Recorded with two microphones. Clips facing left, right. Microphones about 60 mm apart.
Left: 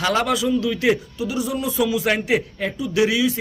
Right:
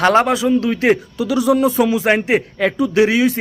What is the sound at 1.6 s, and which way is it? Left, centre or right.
Speech, right.